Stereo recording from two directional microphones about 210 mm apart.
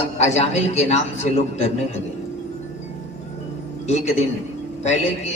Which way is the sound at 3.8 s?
30° left (ahead or behind).